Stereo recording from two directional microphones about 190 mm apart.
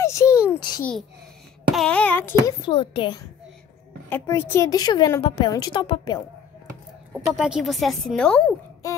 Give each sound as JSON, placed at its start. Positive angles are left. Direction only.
{"t": 0.0, "sound": "a sound", "side_deg": 15}
{"t": 0.6, "sound": "babbling", "side_deg": 20}
{"t": 1.7, "sound": "a sound", "side_deg": 5}
{"t": 2.6, "sound": "a woman's voice", "side_deg": 25}
{"t": 4.1, "sound": "a woman's voice", "side_deg": 15}
{"t": 7.2, "sound": "a woman's voice", "side_deg": 0}